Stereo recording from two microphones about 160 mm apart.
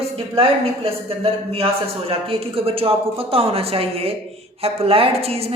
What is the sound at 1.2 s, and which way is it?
Speech, 35° right (ahead or behind).